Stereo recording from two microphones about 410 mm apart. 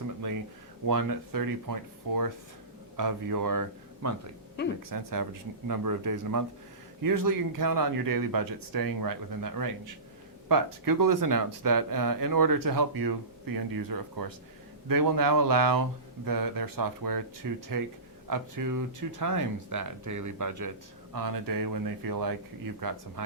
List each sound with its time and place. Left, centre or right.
0.9 s speech: right